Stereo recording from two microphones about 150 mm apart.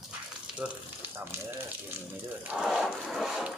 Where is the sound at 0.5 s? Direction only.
10° right (ahead or behind).